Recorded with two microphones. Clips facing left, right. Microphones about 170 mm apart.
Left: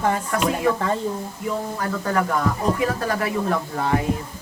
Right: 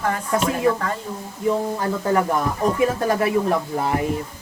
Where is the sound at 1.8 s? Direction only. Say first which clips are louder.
Right 3 dB; 20° right (ahead or behind).